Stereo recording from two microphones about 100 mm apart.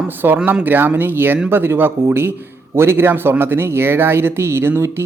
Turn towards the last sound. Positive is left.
turn(degrees=-25)  # may be behind; listen again after turning